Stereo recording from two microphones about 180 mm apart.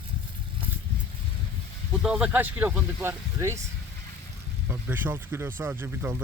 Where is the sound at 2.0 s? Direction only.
5° right (ahead or behind).